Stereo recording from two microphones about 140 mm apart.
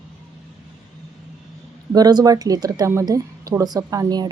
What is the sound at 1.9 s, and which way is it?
A woman's voice, 30° right (ahead or behind).